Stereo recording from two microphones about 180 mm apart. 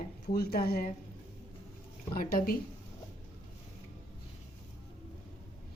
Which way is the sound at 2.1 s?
55° left (ahead or behind).